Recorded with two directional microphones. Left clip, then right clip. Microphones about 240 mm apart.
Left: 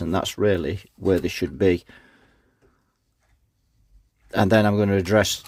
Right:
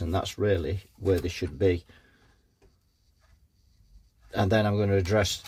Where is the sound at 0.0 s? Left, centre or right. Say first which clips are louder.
Left 6 dB; left.